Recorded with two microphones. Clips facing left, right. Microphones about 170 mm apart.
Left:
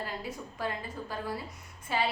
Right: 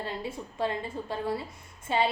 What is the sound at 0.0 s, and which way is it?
Speech, 25° right (ahead or behind).